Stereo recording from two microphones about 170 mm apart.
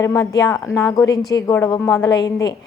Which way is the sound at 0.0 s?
20° left (ahead or behind).